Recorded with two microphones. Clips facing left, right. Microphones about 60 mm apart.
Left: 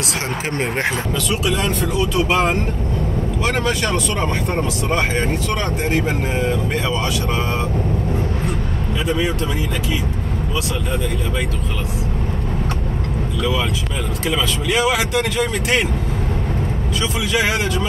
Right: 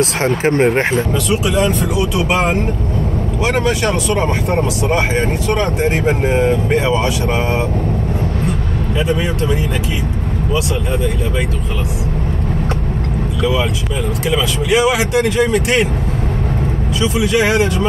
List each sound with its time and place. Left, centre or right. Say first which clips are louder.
0.0 s speech: right 9 dB; right
13.4 s speech: right 4 dB; centre
17.0 s speech: right 5 dB; right